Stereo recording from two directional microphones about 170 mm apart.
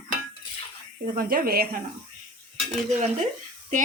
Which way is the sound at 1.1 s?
55° right (ahead or behind).